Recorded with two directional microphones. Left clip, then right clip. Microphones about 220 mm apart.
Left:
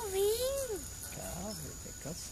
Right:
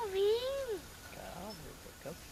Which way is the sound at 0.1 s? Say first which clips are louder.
Left 1 dB; 25° left (ahead or behind).